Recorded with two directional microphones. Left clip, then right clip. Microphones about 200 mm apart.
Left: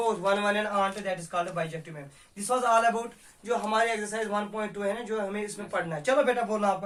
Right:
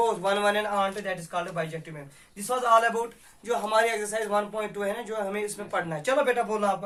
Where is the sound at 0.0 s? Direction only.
35° right (ahead or behind).